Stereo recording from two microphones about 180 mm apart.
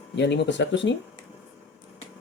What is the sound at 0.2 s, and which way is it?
Speech, 75° left (ahead or behind).